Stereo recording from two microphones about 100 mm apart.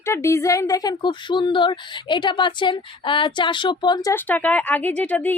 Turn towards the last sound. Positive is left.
turn(degrees=15)  # may be behind; listen again after turning